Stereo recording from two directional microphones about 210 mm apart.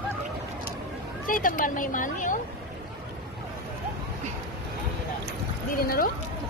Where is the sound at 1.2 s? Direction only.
40° left (ahead or behind).